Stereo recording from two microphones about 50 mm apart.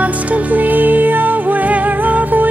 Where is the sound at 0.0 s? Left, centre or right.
Right.